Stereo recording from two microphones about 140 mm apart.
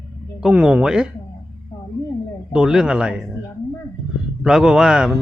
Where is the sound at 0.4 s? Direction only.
5° right (ahead or behind).